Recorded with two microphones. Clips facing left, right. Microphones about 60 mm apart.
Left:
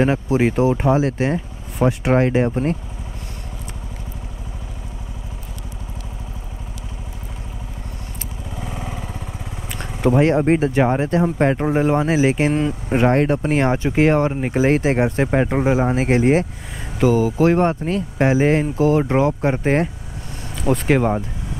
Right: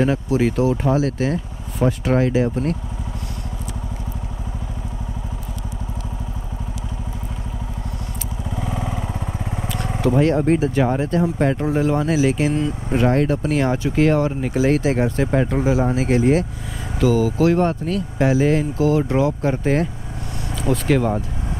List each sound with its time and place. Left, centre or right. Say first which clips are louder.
0.0 s speech: left 1 dB; left
8.5 s vehicle: right 4 dB; right
10.0 s speech: left 2 dB; left